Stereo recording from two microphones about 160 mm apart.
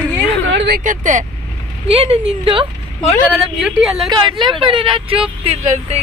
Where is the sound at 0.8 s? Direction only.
55° right (ahead or behind).